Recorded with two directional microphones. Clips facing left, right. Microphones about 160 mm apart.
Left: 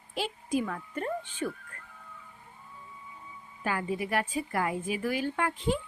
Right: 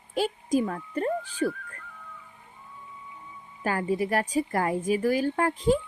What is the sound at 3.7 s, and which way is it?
A woman's voice, 40° right (ahead or behind).